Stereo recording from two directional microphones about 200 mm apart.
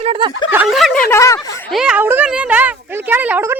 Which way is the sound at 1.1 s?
15° left (ahead or behind).